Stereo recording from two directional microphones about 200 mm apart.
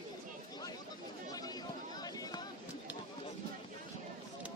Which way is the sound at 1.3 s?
20° left (ahead or behind).